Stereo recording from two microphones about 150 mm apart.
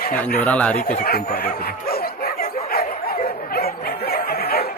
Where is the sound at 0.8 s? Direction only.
75° left (ahead or behind); by 1.9 s 90° left.